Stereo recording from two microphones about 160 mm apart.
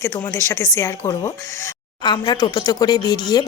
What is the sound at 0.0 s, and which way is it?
A woman's voice, 20° left (ahead or behind).